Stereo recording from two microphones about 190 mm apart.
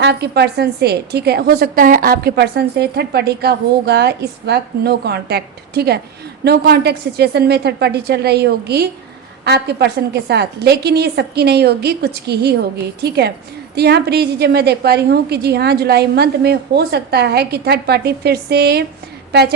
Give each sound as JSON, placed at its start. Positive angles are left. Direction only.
{"t": 0.0, "sound": "a woman's voice", "side_deg": -60}